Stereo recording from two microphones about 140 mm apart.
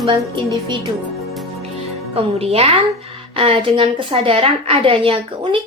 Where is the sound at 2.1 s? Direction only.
45° right (ahead or behind).